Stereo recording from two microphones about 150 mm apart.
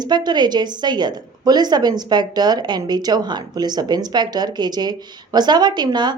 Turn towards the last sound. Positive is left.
turn(degrees=-30)  # may be behind; listen again after turning